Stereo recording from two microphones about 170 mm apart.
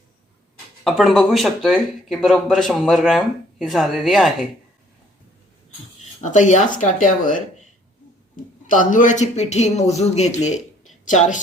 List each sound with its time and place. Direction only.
0.9 s speech: centre (ahead or behind)
6.2 s speech: 45° left (ahead or behind)
8.6 s a man's voice: 50° left (ahead or behind)